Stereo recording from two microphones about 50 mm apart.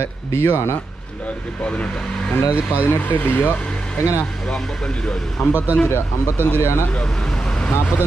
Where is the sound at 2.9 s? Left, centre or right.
Left.